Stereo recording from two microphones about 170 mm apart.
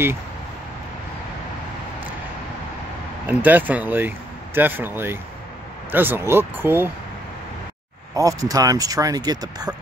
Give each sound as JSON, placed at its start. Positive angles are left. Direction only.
{"t": 3.3, "sound": "speech", "side_deg": -10}
{"t": 8.1, "sound": "speech", "side_deg": -20}